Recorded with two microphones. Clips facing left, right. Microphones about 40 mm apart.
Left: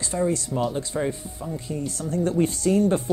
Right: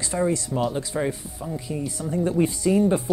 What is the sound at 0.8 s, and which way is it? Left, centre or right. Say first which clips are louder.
Speech: even; centre.